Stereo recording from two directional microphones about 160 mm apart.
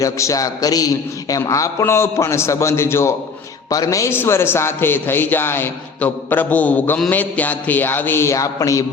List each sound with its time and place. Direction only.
0.0 s a man's voice: 20° left (ahead or behind)